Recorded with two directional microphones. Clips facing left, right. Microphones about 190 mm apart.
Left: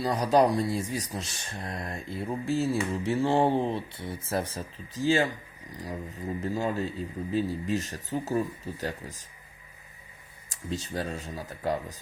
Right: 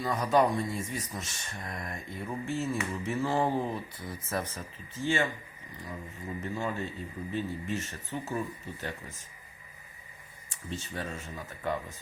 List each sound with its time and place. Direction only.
0.0 s speech: 35° left (ahead or behind)
10.5 s speech: 35° left (ahead or behind)